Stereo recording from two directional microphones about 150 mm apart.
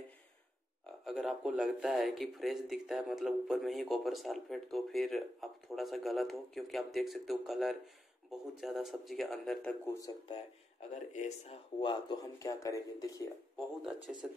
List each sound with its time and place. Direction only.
1.0 s speech: centre (ahead or behind)
10.9 s speech: 50° left (ahead or behind)
11.8 s speech: 30° left (ahead or behind)
13.9 s speech: centre (ahead or behind)